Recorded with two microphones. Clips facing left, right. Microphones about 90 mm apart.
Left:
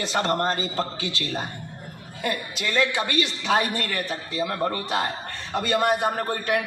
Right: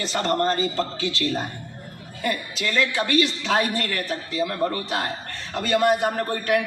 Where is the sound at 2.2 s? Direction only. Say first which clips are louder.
Right 1 dB; 20° left (ahead or behind).